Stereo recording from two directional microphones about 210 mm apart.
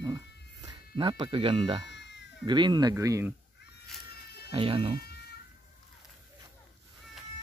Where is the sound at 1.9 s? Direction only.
55° left (ahead or behind).